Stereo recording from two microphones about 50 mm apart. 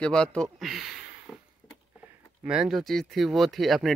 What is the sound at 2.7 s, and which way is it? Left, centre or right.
Speech, centre.